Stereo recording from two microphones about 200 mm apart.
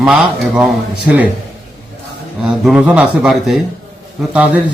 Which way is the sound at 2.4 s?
5° right (ahead or behind).